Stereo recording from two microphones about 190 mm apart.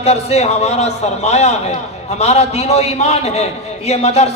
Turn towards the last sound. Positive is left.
turn(degrees=35)  # may be behind; listen again after turning